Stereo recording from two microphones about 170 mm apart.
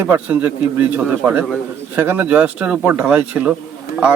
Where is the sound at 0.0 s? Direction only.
10° right (ahead or behind).